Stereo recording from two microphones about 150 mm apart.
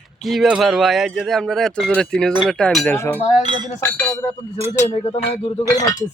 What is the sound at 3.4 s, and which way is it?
Chink, 30° right (ahead or behind).